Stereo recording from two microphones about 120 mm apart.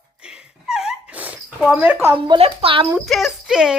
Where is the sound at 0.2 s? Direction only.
5° right (ahead or behind).